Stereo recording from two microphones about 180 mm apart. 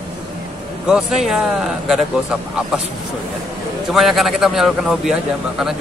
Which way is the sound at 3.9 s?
Centre (ahead or behind).